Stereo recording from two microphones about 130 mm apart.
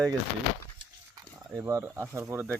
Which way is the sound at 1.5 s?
20° right (ahead or behind).